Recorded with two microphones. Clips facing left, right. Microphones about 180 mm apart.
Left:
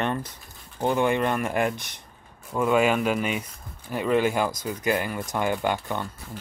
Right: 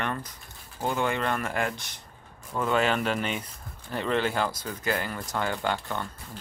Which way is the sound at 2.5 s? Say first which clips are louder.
Left 4 dB; 10° left (ahead or behind).